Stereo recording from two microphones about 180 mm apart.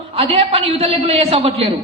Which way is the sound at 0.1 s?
35° right (ahead or behind).